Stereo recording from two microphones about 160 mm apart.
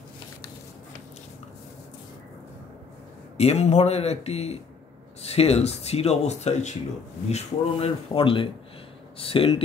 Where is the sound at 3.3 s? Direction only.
40° left (ahead or behind).